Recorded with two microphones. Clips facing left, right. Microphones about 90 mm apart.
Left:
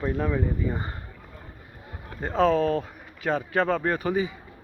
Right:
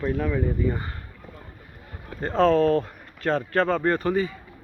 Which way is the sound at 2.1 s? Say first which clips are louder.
Right 2 dB; 5° left (ahead or behind).